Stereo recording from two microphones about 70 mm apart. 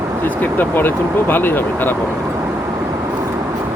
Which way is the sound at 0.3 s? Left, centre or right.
Left.